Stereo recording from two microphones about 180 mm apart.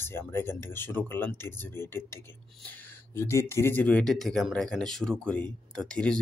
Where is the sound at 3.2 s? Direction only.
15° left (ahead or behind).